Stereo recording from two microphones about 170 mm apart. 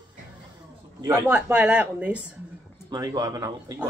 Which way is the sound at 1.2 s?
5° right (ahead or behind).